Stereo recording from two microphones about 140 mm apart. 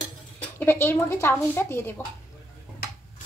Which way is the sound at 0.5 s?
15° left (ahead or behind).